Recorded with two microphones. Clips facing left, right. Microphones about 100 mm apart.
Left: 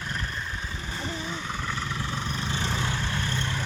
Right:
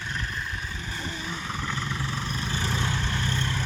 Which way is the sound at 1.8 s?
15° left (ahead or behind).